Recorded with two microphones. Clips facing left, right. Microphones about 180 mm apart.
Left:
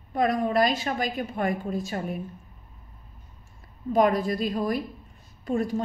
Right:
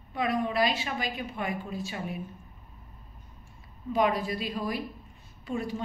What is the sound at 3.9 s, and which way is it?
A woman's voice, 45° left (ahead or behind).